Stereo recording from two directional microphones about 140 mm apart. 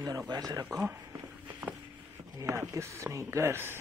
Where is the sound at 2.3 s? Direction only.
25° right (ahead or behind).